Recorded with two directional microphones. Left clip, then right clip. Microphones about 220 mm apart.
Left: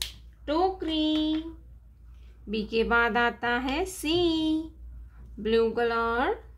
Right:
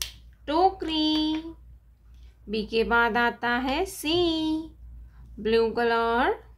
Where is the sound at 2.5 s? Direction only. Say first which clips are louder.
Right 1 dB; 5° right (ahead or behind).